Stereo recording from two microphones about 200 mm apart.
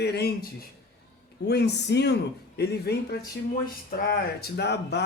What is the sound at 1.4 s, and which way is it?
Speech, 55° left (ahead or behind).